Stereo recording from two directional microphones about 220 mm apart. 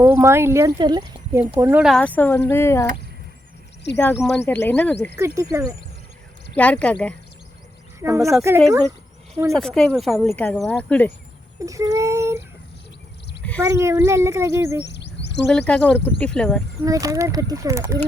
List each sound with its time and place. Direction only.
0.0 s speech: 10° right (ahead or behind); by 3.0 s 15° left (ahead or behind)
4.1 s speech: centre (ahead or behind)
5.1 s speech: 15° right (ahead or behind)
6.6 s speech: 5° left (ahead or behind)
8.0 s speech: 15° right (ahead or behind)
9.5 s speech: centre (ahead or behind)
11.6 s speech: 15° right (ahead or behind)
13.6 s speech: 10° right (ahead or behind)
14.9 s bird: 50° left (ahead or behind)
15.4 s speech: 5° left (ahead or behind)
16.8 s speech: 15° right (ahead or behind)